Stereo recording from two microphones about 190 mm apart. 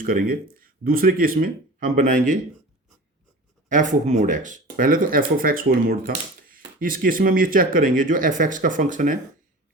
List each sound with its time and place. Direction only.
0.0 s speech: 50° right (ahead or behind)
3.7 s speech: 40° right (ahead or behind)